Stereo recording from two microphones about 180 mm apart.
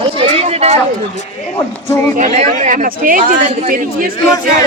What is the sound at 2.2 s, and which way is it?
Speech, 45° right (ahead or behind).